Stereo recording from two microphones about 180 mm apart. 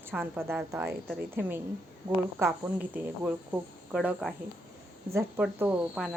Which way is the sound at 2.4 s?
15° right (ahead or behind).